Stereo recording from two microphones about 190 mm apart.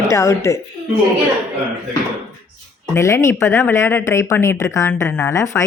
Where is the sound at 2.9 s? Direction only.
15° left (ahead or behind).